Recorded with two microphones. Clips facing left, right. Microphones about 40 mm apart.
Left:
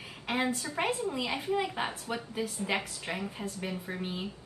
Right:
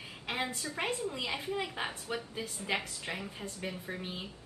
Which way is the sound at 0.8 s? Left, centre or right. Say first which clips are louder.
Left 3 dB; centre.